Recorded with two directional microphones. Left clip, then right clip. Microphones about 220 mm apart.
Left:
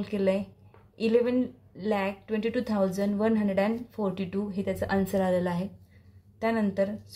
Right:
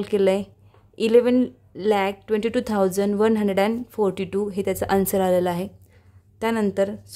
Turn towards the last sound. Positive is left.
turn(degrees=-50)  # may be behind; listen again after turning